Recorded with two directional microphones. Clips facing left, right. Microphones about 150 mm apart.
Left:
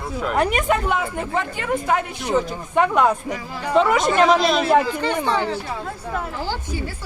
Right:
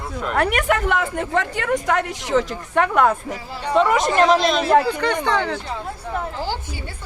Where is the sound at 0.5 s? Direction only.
80° right.